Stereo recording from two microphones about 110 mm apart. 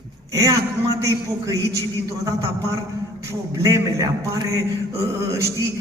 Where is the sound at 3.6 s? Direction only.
30° right (ahead or behind).